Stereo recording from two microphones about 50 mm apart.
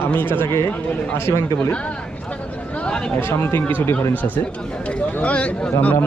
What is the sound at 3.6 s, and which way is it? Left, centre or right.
A man's voice, left.